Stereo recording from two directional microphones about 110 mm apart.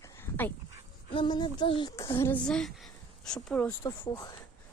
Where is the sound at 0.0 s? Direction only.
20° left (ahead or behind).